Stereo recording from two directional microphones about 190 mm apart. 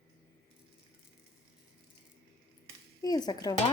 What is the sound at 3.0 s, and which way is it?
Speech, 20° left (ahead or behind).